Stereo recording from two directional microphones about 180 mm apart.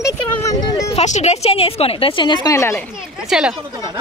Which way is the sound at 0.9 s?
40° left (ahead or behind).